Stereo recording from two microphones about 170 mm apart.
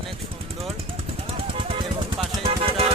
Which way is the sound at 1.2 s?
30° right (ahead or behind).